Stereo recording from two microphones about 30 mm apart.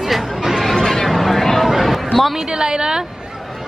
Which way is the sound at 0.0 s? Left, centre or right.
Centre.